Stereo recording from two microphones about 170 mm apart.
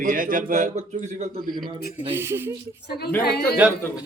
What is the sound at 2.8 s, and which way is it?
Speech, 70° left (ahead or behind).